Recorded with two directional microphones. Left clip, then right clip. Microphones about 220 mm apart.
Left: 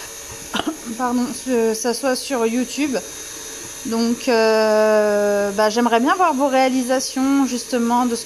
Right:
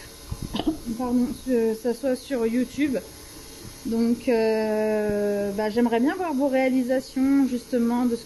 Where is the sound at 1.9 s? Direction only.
10° left (ahead or behind).